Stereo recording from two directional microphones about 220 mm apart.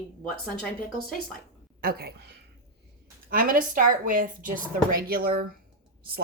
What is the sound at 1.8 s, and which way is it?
Speech, 45° right (ahead or behind).